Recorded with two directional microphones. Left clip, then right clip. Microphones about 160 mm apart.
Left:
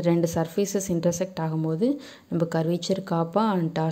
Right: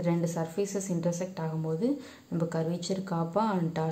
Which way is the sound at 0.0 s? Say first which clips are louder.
Left 7 dB; 40° left (ahead or behind).